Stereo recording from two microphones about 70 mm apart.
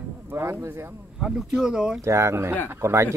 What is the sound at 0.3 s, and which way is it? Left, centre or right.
Speech, right.